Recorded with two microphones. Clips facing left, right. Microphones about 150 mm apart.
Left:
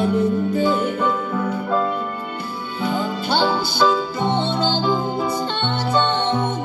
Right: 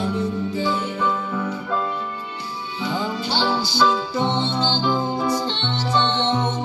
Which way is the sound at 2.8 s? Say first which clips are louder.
Left 3 dB; 55° left (ahead or behind).